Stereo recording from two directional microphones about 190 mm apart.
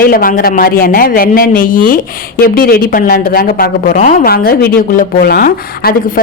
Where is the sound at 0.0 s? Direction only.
50° left (ahead or behind).